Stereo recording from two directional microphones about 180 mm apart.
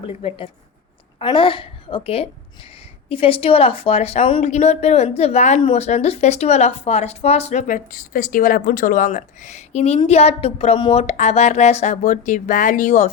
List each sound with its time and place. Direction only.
0.1 s a woman's voice: 35° left (ahead or behind)